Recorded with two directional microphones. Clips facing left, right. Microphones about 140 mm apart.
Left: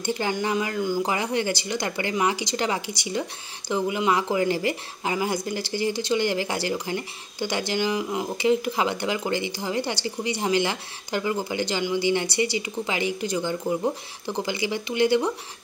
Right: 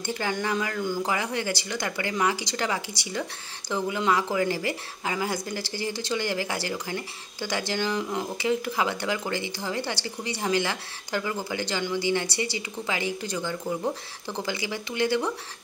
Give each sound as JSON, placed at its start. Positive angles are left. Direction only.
{"t": 0.0, "sound": "speech", "side_deg": 20}